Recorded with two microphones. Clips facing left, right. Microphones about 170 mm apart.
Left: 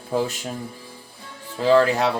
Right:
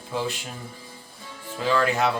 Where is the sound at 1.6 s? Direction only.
30° left (ahead or behind).